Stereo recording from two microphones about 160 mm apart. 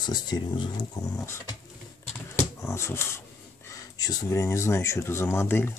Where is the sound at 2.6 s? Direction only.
15° left (ahead or behind).